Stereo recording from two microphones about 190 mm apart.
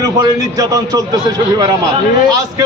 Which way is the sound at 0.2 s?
20° right (ahead or behind).